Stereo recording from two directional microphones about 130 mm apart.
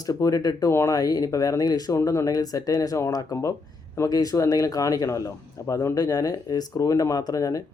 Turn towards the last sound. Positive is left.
turn(degrees=30)  # may be behind; listen again after turning